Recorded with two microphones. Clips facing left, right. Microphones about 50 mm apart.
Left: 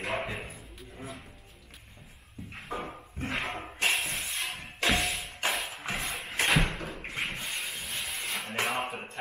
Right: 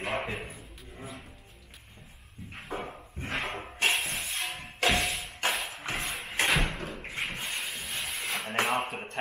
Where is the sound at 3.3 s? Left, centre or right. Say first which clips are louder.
Right 2 dB; centre.